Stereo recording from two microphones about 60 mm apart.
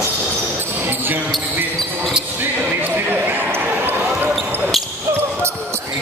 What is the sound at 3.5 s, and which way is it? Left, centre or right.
Basketball bounce, right.